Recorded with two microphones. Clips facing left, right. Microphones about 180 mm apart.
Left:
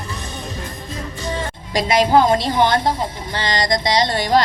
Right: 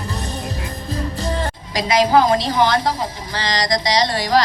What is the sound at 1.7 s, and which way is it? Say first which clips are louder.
A woman's voice: left 1 dB; 25° left (ahead or behind).